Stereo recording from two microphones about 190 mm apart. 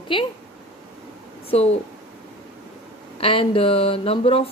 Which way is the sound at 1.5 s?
30° left (ahead or behind).